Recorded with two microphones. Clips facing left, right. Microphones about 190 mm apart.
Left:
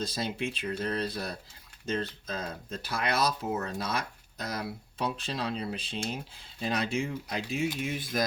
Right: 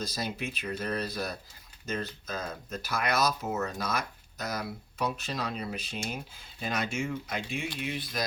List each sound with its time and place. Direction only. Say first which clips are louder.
0.0 s speech: left 2 dB; 25° left (ahead or behind); by 8.2 s 45° left (ahead or behind)